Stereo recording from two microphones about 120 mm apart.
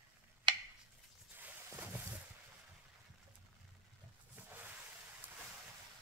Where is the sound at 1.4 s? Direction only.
20° right (ahead or behind).